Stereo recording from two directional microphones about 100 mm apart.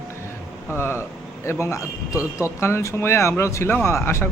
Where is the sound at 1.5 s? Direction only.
25° left (ahead or behind).